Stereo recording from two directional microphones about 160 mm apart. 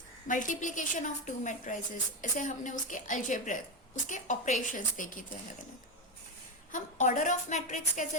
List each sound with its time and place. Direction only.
0.3 s a woman's voice: 55° left (ahead or behind)
6.7 s a woman's voice: 50° left (ahead or behind)